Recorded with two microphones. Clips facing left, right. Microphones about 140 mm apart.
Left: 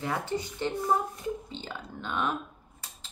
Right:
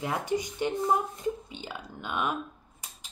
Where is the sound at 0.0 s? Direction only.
15° right (ahead or behind).